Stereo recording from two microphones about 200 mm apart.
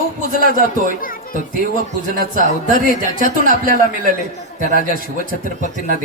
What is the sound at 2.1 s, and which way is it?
Speech, 40° right (ahead or behind).